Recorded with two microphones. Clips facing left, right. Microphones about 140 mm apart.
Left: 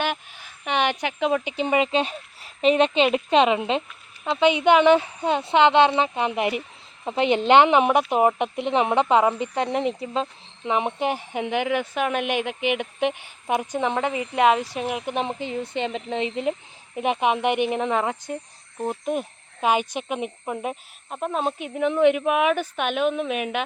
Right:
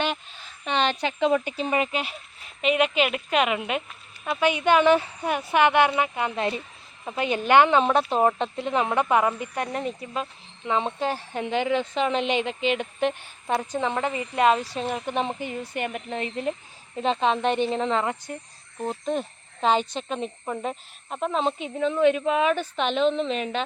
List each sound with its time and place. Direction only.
0.0 s a sound: 10° left (ahead or behind)
2.6 s a woman's voice: 30° left (ahead or behind); by 21.8 s 5° left (ahead or behind)
21.8 s a woman's voice: 15° left (ahead or behind)